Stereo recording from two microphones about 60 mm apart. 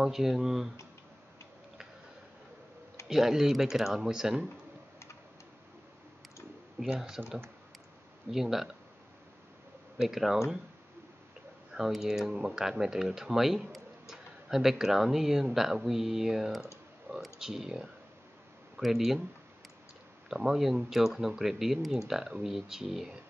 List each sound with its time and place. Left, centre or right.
0.0 s speech: centre
3.1 s speech: centre
6.9 s speech: centre
8.3 s speech: centre
9.9 s speech: centre
11.7 s speech: centre
20.2 s speech: centre